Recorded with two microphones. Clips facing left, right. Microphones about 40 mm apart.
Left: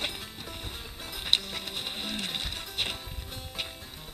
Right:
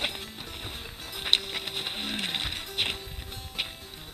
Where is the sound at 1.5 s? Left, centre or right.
Right.